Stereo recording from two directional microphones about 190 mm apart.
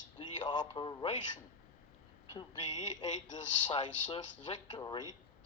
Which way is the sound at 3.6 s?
25° left (ahead or behind).